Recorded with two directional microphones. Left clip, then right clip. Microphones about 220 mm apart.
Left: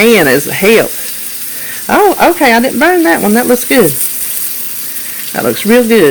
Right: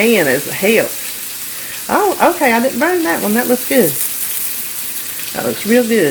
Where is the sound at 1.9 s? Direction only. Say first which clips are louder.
Left 5 dB; 55° left (ahead or behind).